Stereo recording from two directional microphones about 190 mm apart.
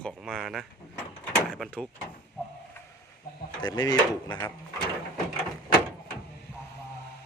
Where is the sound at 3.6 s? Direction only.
20° left (ahead or behind).